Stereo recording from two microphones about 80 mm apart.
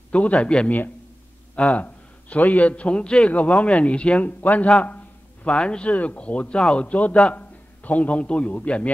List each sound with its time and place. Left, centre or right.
0.1 s a man's voice: centre